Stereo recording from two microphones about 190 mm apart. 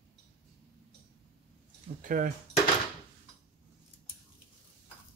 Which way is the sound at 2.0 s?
45° right (ahead or behind).